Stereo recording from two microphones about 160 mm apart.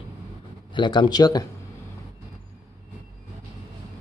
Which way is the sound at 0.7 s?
30° left (ahead or behind).